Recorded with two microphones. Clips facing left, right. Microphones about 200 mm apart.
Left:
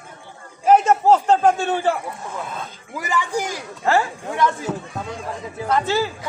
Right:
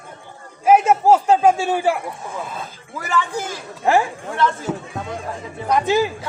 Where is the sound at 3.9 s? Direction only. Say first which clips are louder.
Right 2 dB; 15° right (ahead or behind).